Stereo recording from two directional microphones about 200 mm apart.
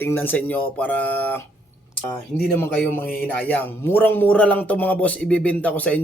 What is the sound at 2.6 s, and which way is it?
A man's voice, 10° left (ahead or behind).